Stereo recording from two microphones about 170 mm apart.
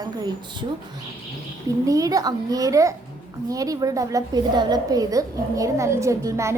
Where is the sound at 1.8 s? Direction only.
20° right (ahead or behind).